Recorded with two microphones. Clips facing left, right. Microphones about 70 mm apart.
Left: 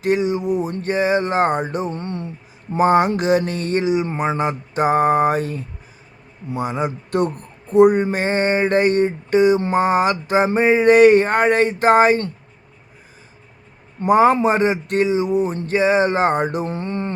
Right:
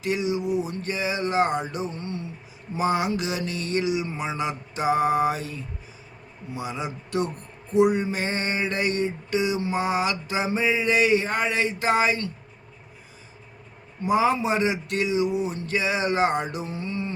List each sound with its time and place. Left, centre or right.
0.0 s speech: left
14.0 s speech: left